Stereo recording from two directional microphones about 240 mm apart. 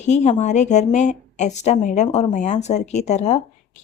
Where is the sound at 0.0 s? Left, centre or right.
Left.